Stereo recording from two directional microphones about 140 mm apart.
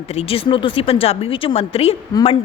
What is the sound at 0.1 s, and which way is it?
A woman's voice, 45° left (ahead or behind).